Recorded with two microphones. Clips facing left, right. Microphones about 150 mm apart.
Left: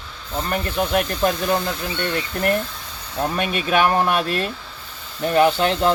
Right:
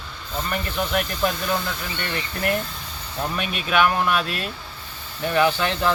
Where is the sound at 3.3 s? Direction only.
40° left (ahead or behind).